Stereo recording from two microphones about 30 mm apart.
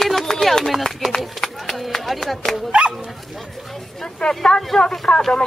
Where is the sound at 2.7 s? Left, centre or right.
Right.